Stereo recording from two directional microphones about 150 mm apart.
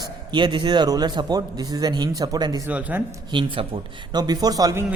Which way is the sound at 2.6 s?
10° right (ahead or behind).